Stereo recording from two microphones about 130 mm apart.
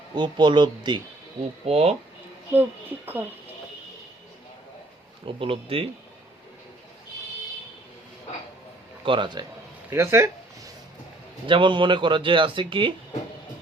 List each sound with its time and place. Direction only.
0.1 s speech: 35° right (ahead or behind)
1.6 s speech: 50° right (ahead or behind)
3.1 s speech: 15° right (ahead or behind)
5.2 s speech: 45° right (ahead or behind)
9.0 s speech: 40° right (ahead or behind)
9.9 s speech: 20° right (ahead or behind)
11.4 s speech: 40° right (ahead or behind)